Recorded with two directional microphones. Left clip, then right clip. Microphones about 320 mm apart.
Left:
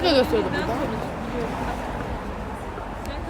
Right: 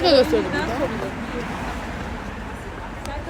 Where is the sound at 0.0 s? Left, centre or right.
Centre.